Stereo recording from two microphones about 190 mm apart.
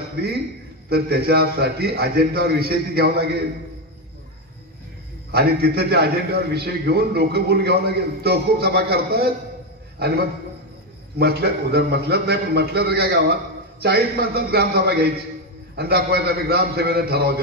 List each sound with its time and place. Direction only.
0.8 s a man's voice: 55° right (ahead or behind)
5.3 s a man's voice: 55° right (ahead or behind)